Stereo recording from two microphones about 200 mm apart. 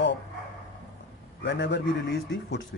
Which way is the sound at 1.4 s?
60° left (ahead or behind).